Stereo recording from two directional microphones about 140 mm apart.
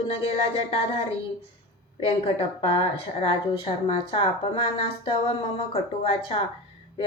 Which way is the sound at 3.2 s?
40° left (ahead or behind).